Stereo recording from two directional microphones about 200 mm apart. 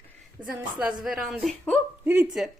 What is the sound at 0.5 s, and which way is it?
Speech, 5° right (ahead or behind).